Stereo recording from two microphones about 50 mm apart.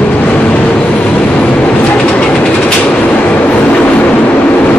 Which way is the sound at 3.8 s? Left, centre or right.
Left.